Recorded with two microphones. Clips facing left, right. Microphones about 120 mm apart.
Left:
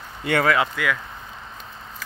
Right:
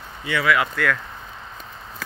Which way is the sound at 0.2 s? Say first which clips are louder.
Left 4 dB; 55° left (ahead or behind).